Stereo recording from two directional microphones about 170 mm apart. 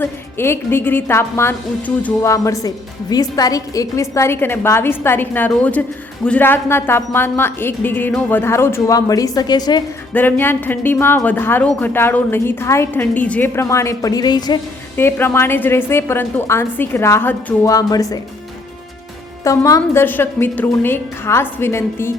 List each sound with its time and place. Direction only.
0.0 s speech: 15° left (ahead or behind)
10.2 s speech: 10° left (ahead or behind)
14.9 s speech: 15° left (ahead or behind)
19.5 s speech: 20° left (ahead or behind)